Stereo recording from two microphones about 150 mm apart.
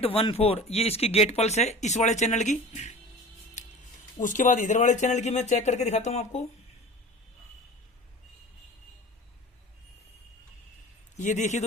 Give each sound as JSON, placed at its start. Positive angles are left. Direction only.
{"t": 0.0, "sound": "speech", "side_deg": 40}
{"t": 4.2, "sound": "speech", "side_deg": 60}
{"t": 11.2, "sound": "speech", "side_deg": 55}